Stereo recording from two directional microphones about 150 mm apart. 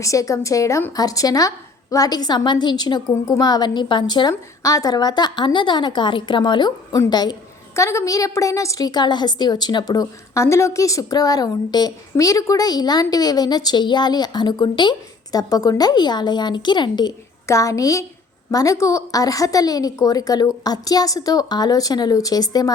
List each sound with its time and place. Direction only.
0.0 s a woman's voice: 20° left (ahead or behind)